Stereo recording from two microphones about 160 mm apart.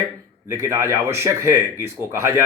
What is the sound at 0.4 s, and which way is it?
Speech, 15° right (ahead or behind).